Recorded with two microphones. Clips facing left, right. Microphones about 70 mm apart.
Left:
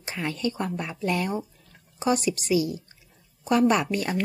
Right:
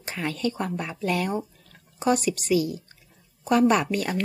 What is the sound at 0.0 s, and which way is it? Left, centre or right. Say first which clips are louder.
Speech: right 1 dB; centre.